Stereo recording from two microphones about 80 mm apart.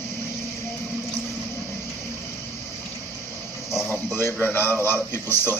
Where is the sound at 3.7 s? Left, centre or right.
Centre.